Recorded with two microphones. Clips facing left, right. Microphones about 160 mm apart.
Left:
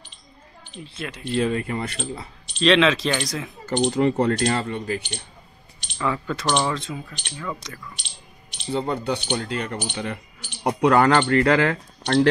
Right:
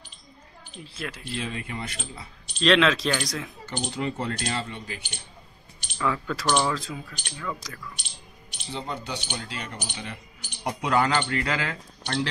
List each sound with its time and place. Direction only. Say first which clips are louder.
0.8 s speech: left 2 dB; centre (ahead or behind)
1.3 s speech: left 13 dB; 45° left (ahead or behind)
2.6 s speech: left 3 dB; centre (ahead or behind)
3.6 s speech: left 12 dB; 45° left (ahead or behind)
4.1 s speech: left 9 dB; 55° left (ahead or behind)
5.9 s speech: left 2 dB; 5° left (ahead or behind)
6.4 s speech: left 1 dB; 20° left (ahead or behind)
6.7 s speech: left 2 dB; centre (ahead or behind)
8.7 s speech: left 9 dB; 55° left (ahead or behind)